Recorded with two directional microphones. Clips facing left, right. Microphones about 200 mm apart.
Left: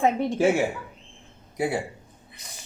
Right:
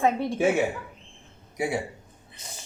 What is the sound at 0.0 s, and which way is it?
Speech, 15° left (ahead or behind).